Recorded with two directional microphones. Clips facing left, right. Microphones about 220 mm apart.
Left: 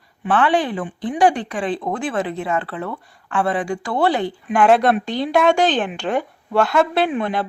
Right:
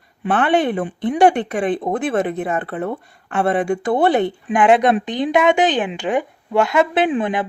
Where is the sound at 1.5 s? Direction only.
55° right (ahead or behind).